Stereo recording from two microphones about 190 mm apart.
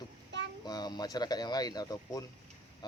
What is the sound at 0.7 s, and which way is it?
Speech, 20° left (ahead or behind).